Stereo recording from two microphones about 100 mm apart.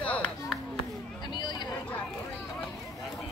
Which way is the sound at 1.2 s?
50° left (ahead or behind).